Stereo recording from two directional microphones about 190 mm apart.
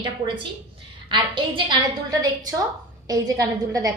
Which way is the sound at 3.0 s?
20° right (ahead or behind).